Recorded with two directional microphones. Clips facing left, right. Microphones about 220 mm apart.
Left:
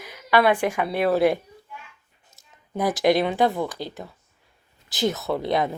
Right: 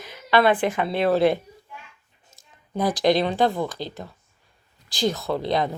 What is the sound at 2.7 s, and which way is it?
Speech, 20° left (ahead or behind).